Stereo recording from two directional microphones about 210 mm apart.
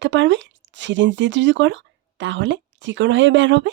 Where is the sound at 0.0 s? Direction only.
60° right (ahead or behind).